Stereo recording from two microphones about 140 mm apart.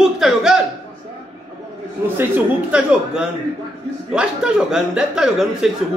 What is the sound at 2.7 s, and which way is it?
Speech, 5° right (ahead or behind).